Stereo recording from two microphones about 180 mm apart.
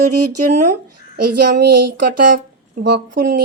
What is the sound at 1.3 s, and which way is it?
Speech, 60° right (ahead or behind).